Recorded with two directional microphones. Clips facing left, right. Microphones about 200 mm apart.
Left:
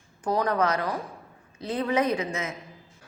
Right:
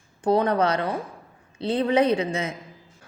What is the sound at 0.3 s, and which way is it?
A woman's voice, 30° right (ahead or behind).